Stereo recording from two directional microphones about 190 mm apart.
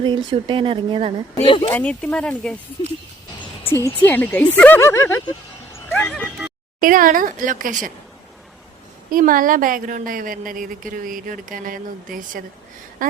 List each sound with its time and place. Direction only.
0.0 s speech: 25° right (ahead or behind)
1.5 s speech: 25° left (ahead or behind)
1.7 s speech: 5° left (ahead or behind)
2.8 s speech: 25° left (ahead or behind)
3.7 s speech: 15° left (ahead or behind)
5.9 s horse: 10° left (ahead or behind)
6.7 s a woman's voice: 45° right (ahead or behind)
9.1 s a woman's voice: 45° right (ahead or behind)